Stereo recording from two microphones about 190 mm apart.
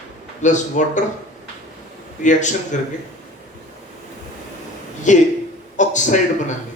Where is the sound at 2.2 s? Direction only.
40° left (ahead or behind).